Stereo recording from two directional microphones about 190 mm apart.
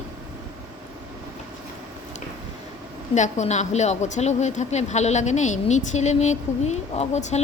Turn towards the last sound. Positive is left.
turn(degrees=35)  # may be behind; listen again after turning